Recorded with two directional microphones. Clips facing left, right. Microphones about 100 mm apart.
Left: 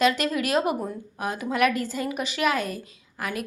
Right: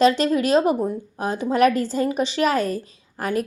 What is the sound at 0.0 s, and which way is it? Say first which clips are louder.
A woman's voice: right 5 dB; 30° right (ahead or behind).